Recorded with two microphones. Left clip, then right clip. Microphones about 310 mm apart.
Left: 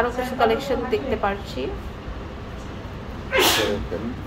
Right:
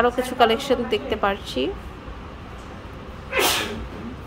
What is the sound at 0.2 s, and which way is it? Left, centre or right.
A woman's voice, right.